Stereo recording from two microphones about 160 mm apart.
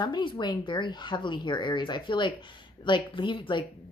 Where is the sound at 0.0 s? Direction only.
30° left (ahead or behind).